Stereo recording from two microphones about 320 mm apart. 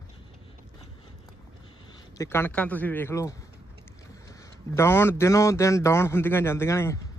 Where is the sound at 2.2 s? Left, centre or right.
Centre.